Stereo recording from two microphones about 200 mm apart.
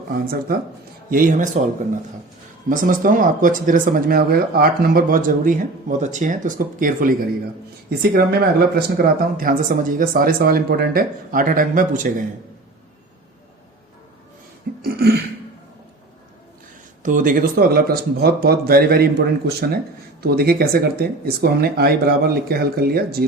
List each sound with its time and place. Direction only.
1.1 s speech: 40° right (ahead or behind)
14.8 s a sound: 50° right (ahead or behind)
17.0 s speech: 40° right (ahead or behind)